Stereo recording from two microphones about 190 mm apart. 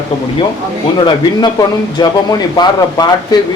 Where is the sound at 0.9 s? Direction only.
25° left (ahead or behind).